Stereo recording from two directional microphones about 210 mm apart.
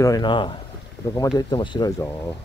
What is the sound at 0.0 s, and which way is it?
Speech, 20° left (ahead or behind).